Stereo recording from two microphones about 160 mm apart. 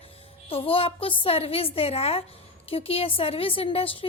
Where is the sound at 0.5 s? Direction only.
35° left (ahead or behind).